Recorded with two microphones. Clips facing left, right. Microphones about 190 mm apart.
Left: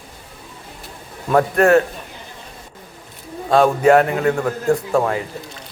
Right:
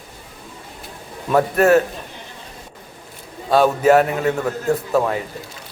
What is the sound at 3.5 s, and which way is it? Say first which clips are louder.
Speech: left 1 dB; 5° right (ahead or behind).